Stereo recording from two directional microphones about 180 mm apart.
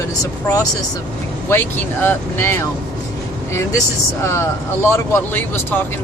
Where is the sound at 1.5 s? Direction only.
10° left (ahead or behind).